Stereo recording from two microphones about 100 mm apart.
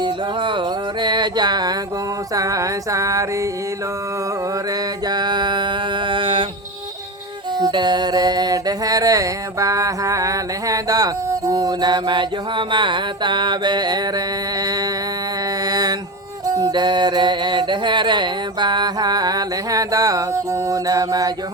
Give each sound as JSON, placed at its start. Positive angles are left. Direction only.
{"t": 0.0, "sound": "music", "side_deg": -55}
{"t": 2.3, "sound": "music", "side_deg": -35}
{"t": 5.0, "sound": "mantra", "side_deg": -45}
{"t": 7.6, "sound": "music", "side_deg": -45}